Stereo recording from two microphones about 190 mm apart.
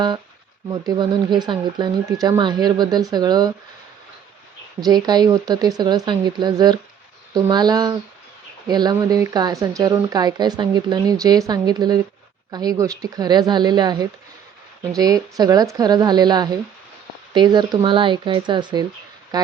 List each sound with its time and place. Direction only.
0.7 s a woman's voice: 25° right (ahead or behind)
4.9 s a woman's voice: 20° right (ahead or behind)